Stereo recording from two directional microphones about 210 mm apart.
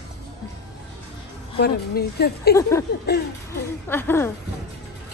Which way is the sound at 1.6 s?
50° left (ahead or behind).